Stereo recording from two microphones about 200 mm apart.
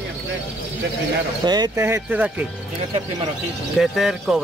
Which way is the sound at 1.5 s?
15° right (ahead or behind).